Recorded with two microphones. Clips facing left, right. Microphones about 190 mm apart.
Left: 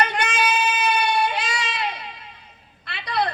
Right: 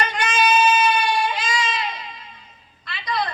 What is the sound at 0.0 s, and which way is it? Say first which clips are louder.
Child singing: right 1 dB; 60° left (ahead or behind).